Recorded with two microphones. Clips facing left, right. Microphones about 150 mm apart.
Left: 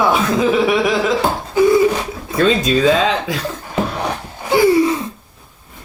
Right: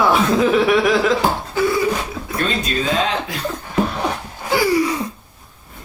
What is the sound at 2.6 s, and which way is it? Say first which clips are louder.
Speech: left 6 dB; 90° left.